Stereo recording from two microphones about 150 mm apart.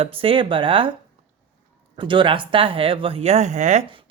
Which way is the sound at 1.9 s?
35° right (ahead or behind).